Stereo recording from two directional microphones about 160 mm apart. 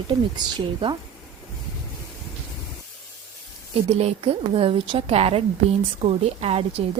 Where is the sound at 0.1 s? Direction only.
25° right (ahead or behind).